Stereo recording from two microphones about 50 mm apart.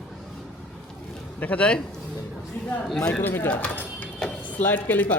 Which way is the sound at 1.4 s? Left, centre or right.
Left.